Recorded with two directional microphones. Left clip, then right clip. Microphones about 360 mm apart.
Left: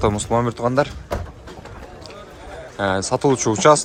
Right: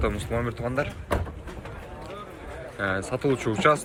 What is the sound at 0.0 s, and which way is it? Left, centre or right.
Speech, centre.